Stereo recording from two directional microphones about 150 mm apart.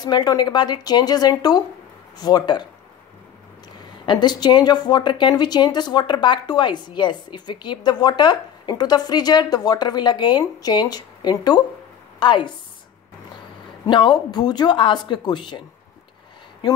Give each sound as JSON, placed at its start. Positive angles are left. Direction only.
{"t": 0.0, "sound": "a woman's voice", "side_deg": 25}
{"t": 4.0, "sound": "a woman's voice", "side_deg": 30}
{"t": 13.8, "sound": "speech", "side_deg": 30}